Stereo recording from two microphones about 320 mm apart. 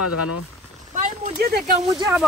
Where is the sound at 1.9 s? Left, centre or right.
Centre.